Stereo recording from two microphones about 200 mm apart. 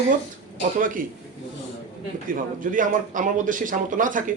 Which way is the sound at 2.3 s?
40° right (ahead or behind).